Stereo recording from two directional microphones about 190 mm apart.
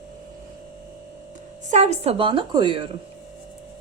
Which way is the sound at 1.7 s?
35° right (ahead or behind).